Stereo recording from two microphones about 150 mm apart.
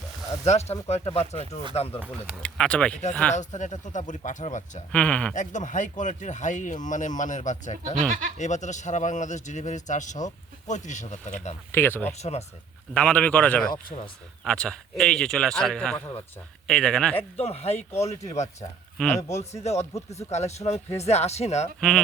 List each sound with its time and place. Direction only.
0.4 s speech: 45° left (ahead or behind)
2.1 s speech: 5° left (ahead or behind)
3.3 s speech: 50° left (ahead or behind)
4.9 s speech: 10° left (ahead or behind)
5.3 s speech: 55° left (ahead or behind)
11.7 s speech: 15° left (ahead or behind)
12.2 s speech: 45° left (ahead or behind)
12.9 s speech: 5° left (ahead or behind)
13.9 s speech: 50° left (ahead or behind)
14.4 s speech: 5° left (ahead or behind)
17.2 s speech: 45° left (ahead or behind)
18.9 s speech: 5° left (ahead or behind)
19.6 s speech: 45° left (ahead or behind)
21.8 s speech: 5° left (ahead or behind)